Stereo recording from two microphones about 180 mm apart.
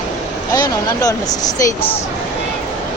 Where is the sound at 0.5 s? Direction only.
20° left (ahead or behind).